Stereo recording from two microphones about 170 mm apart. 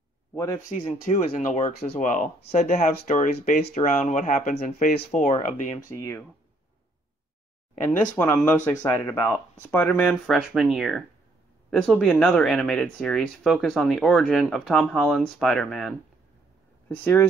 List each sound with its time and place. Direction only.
0.3 s a man's voice: 15° left (ahead or behind)
0.7 s speech: 45° left (ahead or behind)
5.9 s speech: 15° left (ahead or behind)
8.4 s speech: 10° left (ahead or behind)
16.9 s speech: 10° left (ahead or behind)